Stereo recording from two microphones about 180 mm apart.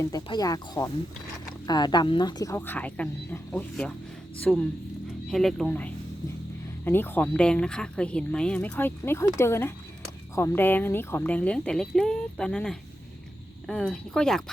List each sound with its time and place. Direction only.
0.1 s speech: 20° left (ahead or behind); by 14.5 s 5° left (ahead or behind)